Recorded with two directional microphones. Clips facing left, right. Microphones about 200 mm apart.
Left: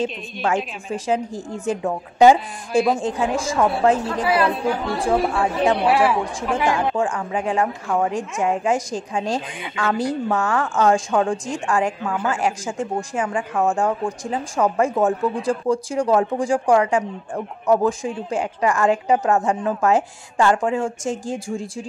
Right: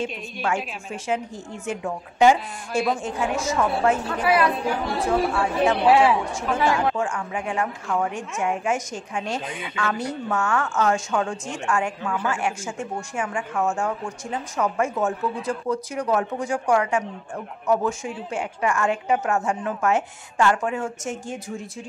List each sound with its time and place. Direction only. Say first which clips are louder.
0.0 s a woman's voice: left 4 dB; 35° left (ahead or behind)
6.2 s a woman's voice: left 1 dB; 15° left (ahead or behind)
7.0 s a woman's voice: left 4 dB; 35° left (ahead or behind)